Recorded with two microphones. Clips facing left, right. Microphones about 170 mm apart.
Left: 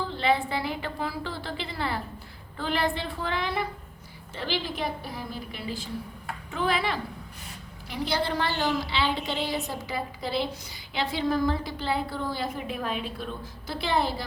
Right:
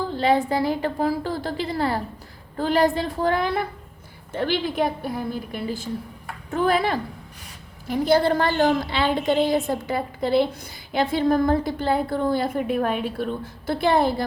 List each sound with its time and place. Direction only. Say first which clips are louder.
0.1 s a woman's voice: right 6 dB; 40° right (ahead or behind)